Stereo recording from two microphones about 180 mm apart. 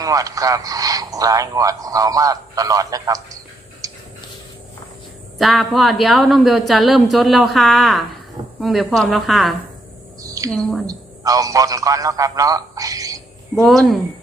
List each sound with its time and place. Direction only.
0.0 s a man's voice: 20° right (ahead or behind)
3.8 s a sound: 20° right (ahead or behind)
5.4 s a woman's voice: centre (ahead or behind)
10.2 s a sound: 20° right (ahead or behind)
10.5 s a woman's voice: centre (ahead or behind)
10.8 s a man's voice: 20° right (ahead or behind)
13.7 s a woman's voice: centre (ahead or behind)